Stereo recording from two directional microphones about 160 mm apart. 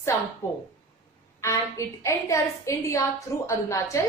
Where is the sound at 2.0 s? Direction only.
20° left (ahead or behind).